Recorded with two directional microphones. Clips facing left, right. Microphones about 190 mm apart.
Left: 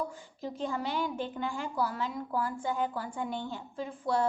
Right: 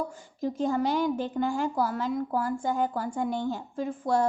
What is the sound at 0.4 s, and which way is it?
A woman's voice, 45° right (ahead or behind).